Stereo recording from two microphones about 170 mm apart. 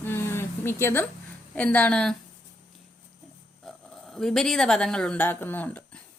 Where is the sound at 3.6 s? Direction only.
Centre (ahead or behind).